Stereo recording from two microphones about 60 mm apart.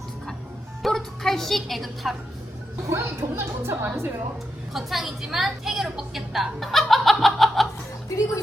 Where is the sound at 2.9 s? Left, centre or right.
Right.